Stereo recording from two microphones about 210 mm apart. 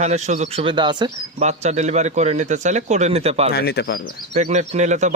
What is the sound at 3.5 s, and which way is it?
Speech, 50° left (ahead or behind).